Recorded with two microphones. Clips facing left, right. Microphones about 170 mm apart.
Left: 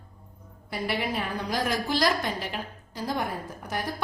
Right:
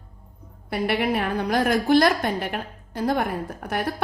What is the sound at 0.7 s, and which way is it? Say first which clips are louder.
A woman's voice: right 6 dB; 60° right (ahead or behind).